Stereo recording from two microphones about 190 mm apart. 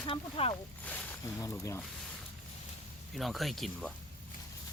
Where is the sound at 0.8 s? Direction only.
10° left (ahead or behind).